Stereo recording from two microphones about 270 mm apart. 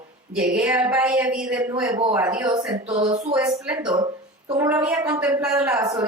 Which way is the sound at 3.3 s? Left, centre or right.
Centre.